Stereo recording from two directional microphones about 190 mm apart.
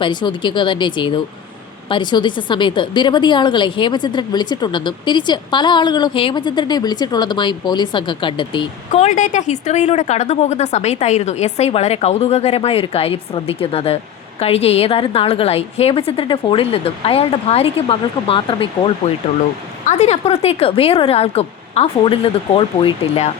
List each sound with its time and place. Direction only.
0.0 s a woman's voice: 25° left (ahead or behind)
19.8 s a woman's voice: 35° left (ahead or behind)